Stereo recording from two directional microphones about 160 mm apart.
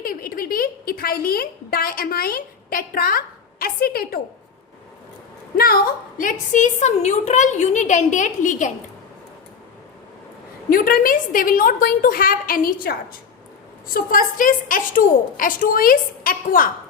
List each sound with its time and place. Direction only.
0.0 s a woman's voice: 65° left (ahead or behind)
5.5 s a woman's voice: 70° left (ahead or behind); by 8.7 s 50° left (ahead or behind)
10.7 s a woman's voice: 60° left (ahead or behind)